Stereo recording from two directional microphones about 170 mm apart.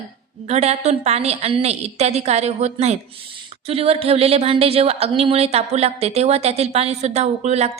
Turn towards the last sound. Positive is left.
turn(degrees=-40)  # may be behind; listen again after turning